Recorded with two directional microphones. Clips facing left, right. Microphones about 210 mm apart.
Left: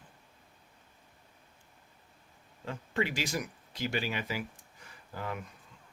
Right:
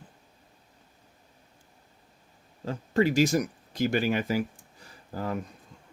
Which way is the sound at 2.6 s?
40° right (ahead or behind).